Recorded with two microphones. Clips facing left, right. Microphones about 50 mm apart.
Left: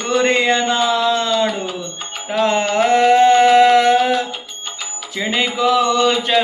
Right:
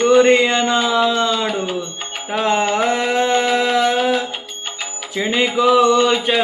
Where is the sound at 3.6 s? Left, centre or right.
Centre.